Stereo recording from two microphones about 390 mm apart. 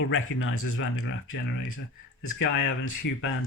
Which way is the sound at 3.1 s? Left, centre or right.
Left.